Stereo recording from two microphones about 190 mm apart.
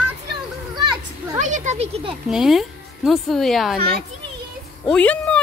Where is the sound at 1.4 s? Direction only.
40° right (ahead or behind).